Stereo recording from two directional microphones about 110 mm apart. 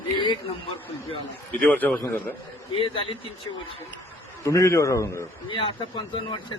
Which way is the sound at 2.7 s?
55° left (ahead or behind).